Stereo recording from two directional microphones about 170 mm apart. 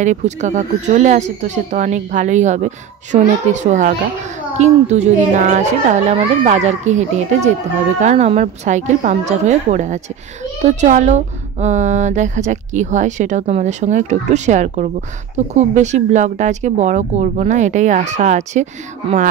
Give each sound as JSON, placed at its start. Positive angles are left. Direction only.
{"t": 0.0, "sound": "speech", "side_deg": -45}